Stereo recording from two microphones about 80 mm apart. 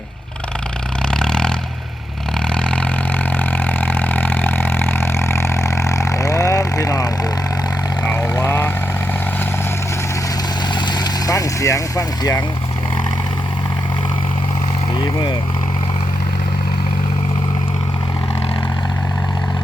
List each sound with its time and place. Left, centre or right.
1.1 s vehicle: centre
2.6 s vehicle: centre
3.3 s vehicle: left
8.4 s vehicle: left
10.8 s vehicle: left
14.9 s vehicle: left